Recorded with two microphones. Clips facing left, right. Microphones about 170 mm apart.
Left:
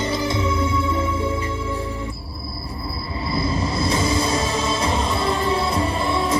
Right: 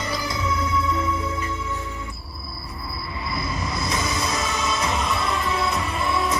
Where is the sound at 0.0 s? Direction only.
25° left (ahead or behind).